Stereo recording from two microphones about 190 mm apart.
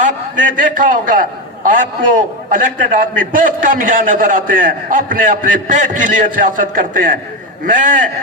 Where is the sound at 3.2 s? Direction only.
45° right (ahead or behind).